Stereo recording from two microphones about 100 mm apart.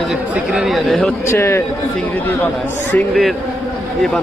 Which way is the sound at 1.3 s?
25° left (ahead or behind).